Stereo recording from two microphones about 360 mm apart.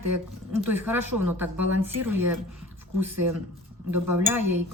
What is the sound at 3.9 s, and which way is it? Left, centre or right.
Speech, right.